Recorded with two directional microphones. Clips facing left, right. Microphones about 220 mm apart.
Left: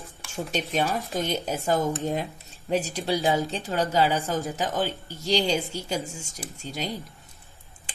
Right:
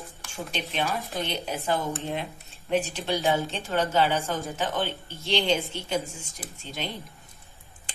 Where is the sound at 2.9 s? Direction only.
10° left (ahead or behind).